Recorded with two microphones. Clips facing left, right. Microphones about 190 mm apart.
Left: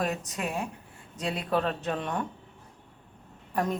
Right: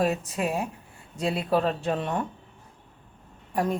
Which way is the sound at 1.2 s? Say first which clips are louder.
Right 5 dB; 35° right (ahead or behind).